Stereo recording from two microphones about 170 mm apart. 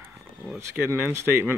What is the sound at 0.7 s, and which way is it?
Speech, 10° right (ahead or behind).